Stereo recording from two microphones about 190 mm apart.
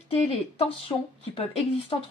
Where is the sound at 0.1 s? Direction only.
30° left (ahead or behind).